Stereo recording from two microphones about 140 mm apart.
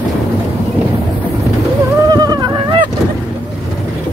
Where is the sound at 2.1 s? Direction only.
30° right (ahead or behind).